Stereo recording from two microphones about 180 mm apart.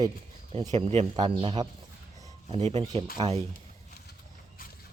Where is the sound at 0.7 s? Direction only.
35° right (ahead or behind).